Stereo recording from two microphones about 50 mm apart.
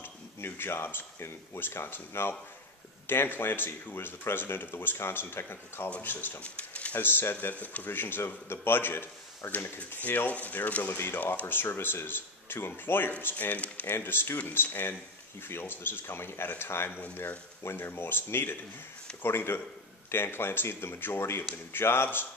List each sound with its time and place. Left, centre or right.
0.4 s speech: left
6.4 s a sound: left
7.0 s speech: left
7.9 s speech: left
9.4 s speech: left
9.8 s speech: left
13.8 s speech: left